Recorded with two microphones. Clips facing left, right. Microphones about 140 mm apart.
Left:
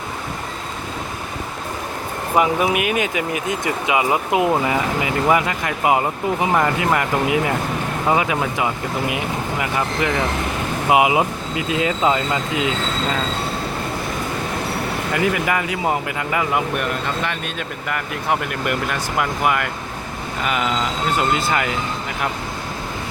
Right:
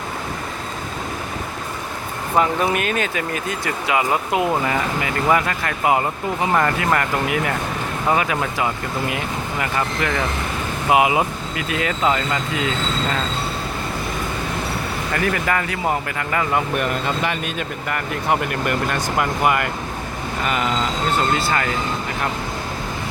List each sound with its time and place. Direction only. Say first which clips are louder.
2.3 s speech: left 1 dB; 10° left (ahead or behind)
15.1 s speech: left 1 dB; 15° left (ahead or behind)
21.2 s speech: left 2 dB; 15° left (ahead or behind)